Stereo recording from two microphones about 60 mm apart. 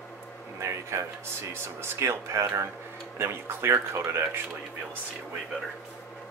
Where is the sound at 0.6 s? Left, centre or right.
Right.